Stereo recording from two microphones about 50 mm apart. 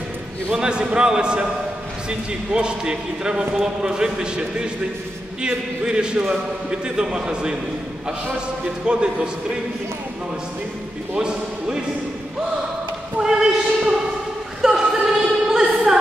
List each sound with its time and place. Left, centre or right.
0.5 s a man's voice: centre
8.8 s a man's voice: centre
11.1 s a man's voice: centre
13.2 s a sound: centre